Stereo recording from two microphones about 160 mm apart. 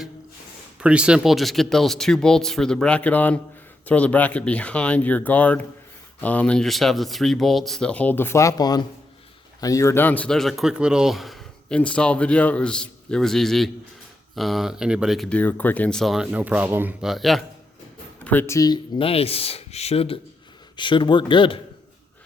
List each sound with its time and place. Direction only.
0.8 s speech: 5° right (ahead or behind)
15.4 s speech: 10° left (ahead or behind); by 16.9 s 15° right (ahead or behind)
17.0 s speech: centre (ahead or behind)
18.3 s a man's voice: 15° left (ahead or behind); by 21.6 s 30° left (ahead or behind)